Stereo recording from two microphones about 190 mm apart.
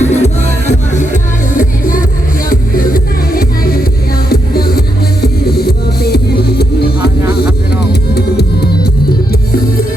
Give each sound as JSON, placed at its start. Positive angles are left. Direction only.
{"t": 0.0, "sound": "music", "side_deg": 35}